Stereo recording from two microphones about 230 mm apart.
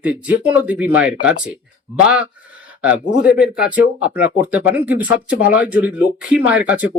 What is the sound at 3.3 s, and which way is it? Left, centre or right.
Speech, centre.